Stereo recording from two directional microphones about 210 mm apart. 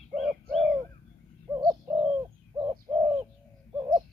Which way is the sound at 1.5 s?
15° right (ahead or behind).